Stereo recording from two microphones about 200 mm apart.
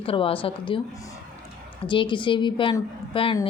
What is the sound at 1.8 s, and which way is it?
Speech, 25° left (ahead or behind).